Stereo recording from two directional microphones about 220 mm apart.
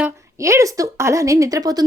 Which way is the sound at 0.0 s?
15° right (ahead or behind).